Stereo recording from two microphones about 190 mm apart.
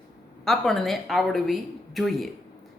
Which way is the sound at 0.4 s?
Centre (ahead or behind).